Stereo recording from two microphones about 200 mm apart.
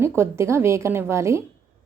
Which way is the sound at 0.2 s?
15° right (ahead or behind).